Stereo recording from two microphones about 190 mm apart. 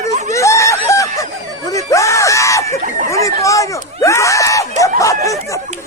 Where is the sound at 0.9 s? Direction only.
15° left (ahead or behind).